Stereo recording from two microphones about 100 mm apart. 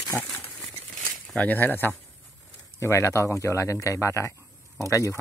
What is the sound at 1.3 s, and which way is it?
A man's voice, 15° left (ahead or behind).